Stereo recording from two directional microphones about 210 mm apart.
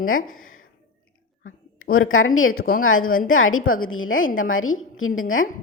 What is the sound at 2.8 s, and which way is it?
Speech, 75° left (ahead or behind).